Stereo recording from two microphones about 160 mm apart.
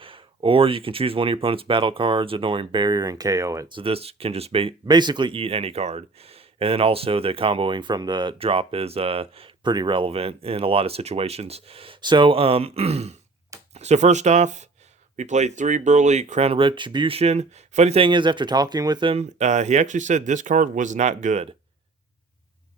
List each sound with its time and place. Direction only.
0.0 s speech: 35° right (ahead or behind)
3.8 s speech: 35° right (ahead or behind)